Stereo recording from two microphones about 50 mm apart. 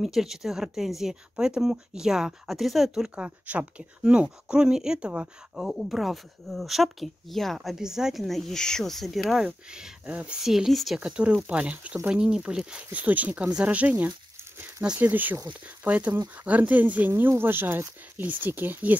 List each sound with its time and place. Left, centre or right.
0.0 s speech: centre
2.9 s speech: centre
3.3 s speech: right
5.6 s speech: centre
7.7 s speech: centre
9.7 s speech: centre
10.0 s speech: right
10.4 s speech: centre
11.1 s speech: right
12.1 s speech: centre
12.9 s speech: right
17.2 s speech: right